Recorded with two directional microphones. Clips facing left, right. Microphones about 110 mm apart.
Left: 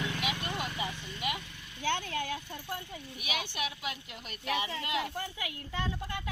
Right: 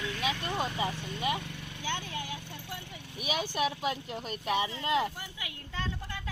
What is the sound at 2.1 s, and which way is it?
Vehicle, 55° left (ahead or behind).